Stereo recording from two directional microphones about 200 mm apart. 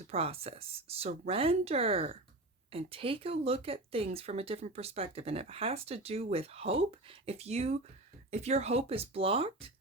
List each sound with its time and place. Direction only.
0.1 s speech: 30° right (ahead or behind)